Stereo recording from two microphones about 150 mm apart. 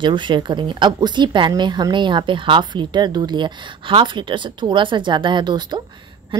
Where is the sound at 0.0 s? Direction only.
30° right (ahead or behind).